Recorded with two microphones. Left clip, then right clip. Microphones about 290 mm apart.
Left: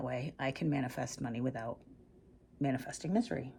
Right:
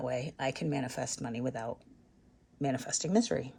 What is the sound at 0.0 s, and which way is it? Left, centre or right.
Speech, centre.